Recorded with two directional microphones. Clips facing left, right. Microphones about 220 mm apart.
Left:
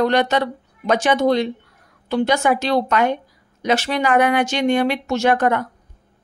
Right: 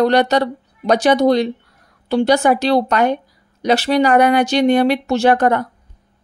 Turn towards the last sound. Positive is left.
turn(degrees=-35)  # may be behind; listen again after turning